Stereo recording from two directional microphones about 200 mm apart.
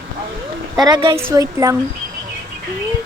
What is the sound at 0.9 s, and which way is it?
Speech, 25° right (ahead or behind).